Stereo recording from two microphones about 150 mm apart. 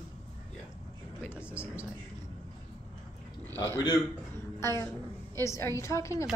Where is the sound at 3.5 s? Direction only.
20° left (ahead or behind).